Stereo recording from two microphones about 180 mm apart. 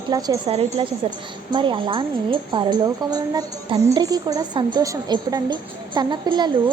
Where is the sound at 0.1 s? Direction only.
20° right (ahead or behind).